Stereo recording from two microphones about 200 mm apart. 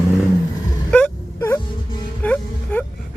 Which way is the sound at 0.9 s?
5° left (ahead or behind).